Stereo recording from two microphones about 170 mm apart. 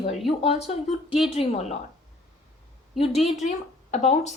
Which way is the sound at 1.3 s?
35° left (ahead or behind).